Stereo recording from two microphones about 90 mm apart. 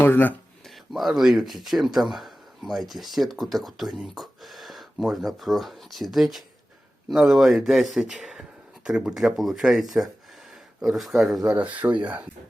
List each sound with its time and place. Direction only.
0.0 s speech: 20° left (ahead or behind)
0.9 s speech: centre (ahead or behind)
11.4 s speech: 15° right (ahead or behind)